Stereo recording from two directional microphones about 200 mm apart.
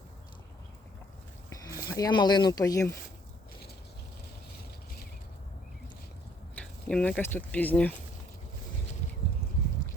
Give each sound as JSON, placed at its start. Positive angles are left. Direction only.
{"t": 1.9, "sound": "speech", "side_deg": 20}
{"t": 6.6, "sound": "speech", "side_deg": 5}